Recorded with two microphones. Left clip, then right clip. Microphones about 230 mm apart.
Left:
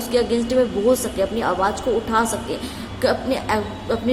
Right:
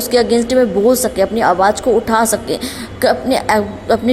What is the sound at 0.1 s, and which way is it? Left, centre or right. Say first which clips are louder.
A woman's voice: right 7 dB; right.